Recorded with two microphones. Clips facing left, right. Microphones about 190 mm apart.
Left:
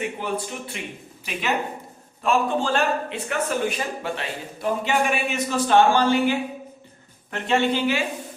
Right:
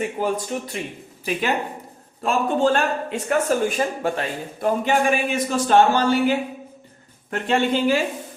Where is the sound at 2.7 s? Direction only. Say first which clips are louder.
Right 1 dB; 45° right (ahead or behind).